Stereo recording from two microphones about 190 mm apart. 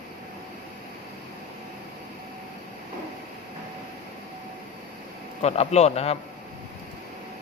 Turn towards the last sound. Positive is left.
turn(degrees=35)  # may be behind; listen again after turning